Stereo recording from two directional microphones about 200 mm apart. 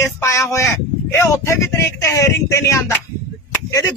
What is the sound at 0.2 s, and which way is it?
A man's voice, 15° left (ahead or behind).